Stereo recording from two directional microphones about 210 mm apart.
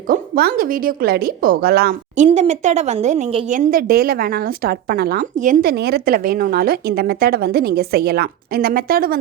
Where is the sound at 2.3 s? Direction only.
30° right (ahead or behind).